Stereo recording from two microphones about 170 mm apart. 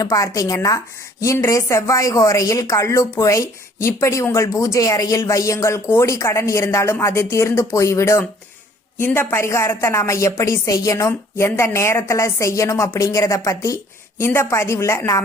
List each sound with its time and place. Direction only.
0.0 s a woman's voice: 20° left (ahead or behind)